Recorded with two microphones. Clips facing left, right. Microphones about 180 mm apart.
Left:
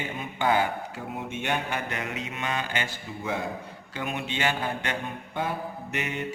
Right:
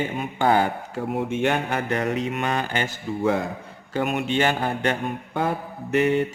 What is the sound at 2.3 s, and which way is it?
A man's voice, 55° right (ahead or behind).